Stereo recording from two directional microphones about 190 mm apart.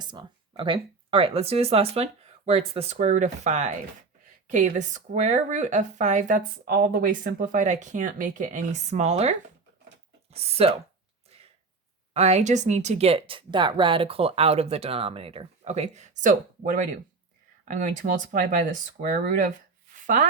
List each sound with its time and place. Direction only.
0.0 s speech: 25° right (ahead or behind)
10.3 s speech: 30° right (ahead or behind)
12.1 s speech: 35° right (ahead or behind)
19.9 s a sound: 45° right (ahead or behind)